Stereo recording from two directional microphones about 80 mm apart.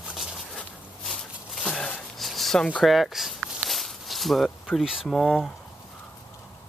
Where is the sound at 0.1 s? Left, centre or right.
Centre.